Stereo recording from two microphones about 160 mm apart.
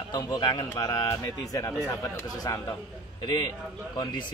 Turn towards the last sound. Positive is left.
turn(degrees=30)  # may be behind; listen again after turning